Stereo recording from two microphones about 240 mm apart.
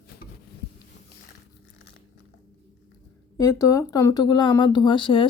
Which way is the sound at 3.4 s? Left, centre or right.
Centre.